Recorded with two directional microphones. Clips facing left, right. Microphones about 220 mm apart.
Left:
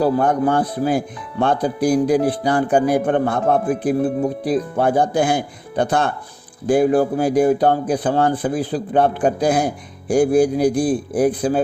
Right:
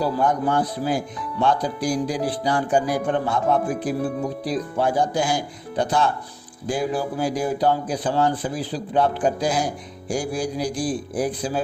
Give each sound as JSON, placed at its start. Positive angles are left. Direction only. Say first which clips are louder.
{"t": 0.0, "sound": "speech", "louder": "left 5 dB", "side_deg": 55}